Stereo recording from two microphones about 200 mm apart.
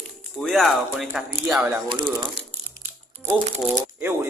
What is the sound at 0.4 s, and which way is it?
Speech, centre (ahead or behind).